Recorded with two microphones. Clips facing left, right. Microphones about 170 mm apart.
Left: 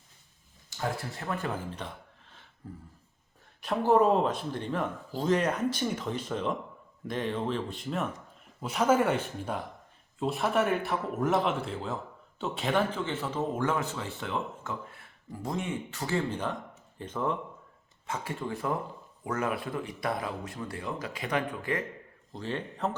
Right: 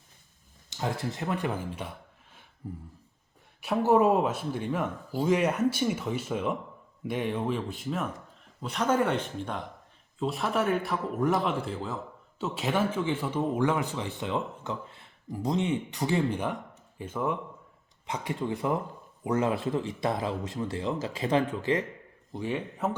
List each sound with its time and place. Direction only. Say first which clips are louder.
0.7 s a man's voice: right 2 dB; 20° right (ahead or behind)